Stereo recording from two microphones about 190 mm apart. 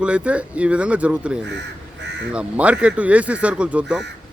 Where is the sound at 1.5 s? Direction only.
65° right (ahead or behind).